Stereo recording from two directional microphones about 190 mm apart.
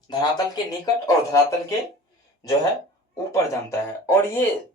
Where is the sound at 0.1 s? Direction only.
20° left (ahead or behind).